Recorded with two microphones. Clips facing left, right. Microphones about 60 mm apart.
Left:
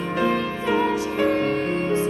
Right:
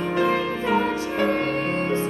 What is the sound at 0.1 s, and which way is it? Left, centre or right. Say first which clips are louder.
Music: even; centre.